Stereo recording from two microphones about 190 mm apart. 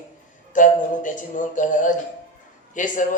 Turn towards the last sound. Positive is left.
turn(degrees=40)  # may be behind; listen again after turning